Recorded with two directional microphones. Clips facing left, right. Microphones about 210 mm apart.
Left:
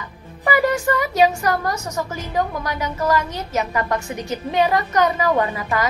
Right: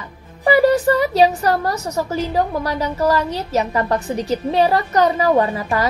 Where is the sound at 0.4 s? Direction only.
35° right (ahead or behind).